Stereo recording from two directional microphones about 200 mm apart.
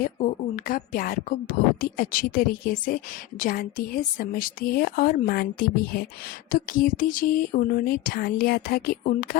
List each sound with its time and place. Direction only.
0.0 s a woman's voice: 45° left (ahead or behind)